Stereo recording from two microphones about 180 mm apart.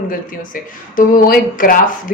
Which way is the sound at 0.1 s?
50° left (ahead or behind).